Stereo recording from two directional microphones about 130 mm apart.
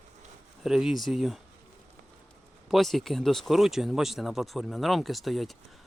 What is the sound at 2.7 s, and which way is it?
Speech, centre (ahead or behind).